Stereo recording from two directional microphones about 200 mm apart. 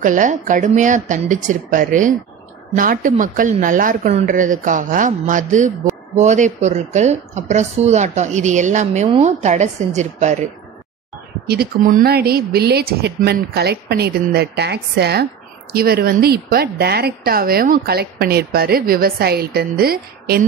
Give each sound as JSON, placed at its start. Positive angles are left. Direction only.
{"t": 0.0, "sound": "speech", "side_deg": -40}
{"t": 11.4, "sound": "speech", "side_deg": -50}